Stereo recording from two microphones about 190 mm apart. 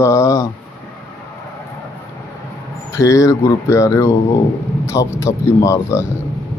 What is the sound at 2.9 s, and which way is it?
Speech, 15° left (ahead or behind).